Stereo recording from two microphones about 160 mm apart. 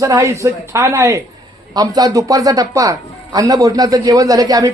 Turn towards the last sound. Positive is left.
turn(degrees=-25)  # may be behind; listen again after turning